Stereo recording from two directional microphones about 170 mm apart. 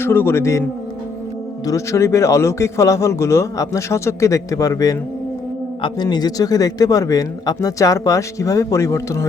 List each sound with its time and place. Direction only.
0.0 s a man's voice: 15° left (ahead or behind)
1.6 s a man's voice: 15° left (ahead or behind)